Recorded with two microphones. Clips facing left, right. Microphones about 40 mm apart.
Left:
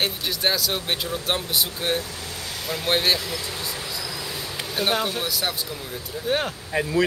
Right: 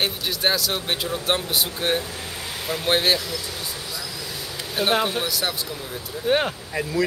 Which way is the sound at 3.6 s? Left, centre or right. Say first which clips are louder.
Left 1 dB; centre.